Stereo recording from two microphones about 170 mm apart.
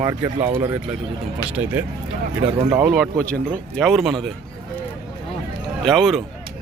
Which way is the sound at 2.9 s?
Centre (ahead or behind).